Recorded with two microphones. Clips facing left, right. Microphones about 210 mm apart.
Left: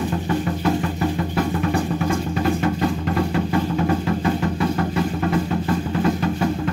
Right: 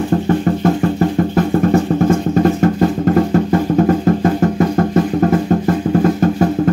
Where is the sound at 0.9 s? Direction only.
45° right (ahead or behind).